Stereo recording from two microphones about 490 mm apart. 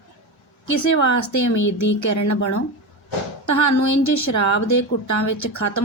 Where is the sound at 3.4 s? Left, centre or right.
Left.